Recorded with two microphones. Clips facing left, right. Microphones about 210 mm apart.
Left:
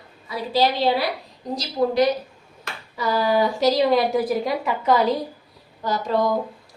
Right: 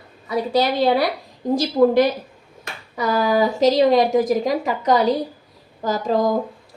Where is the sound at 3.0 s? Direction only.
45° right (ahead or behind).